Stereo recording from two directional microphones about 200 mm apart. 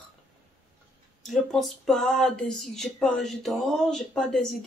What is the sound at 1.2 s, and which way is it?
Speech, centre (ahead or behind).